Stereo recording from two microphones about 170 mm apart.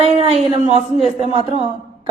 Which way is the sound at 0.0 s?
35° right (ahead or behind).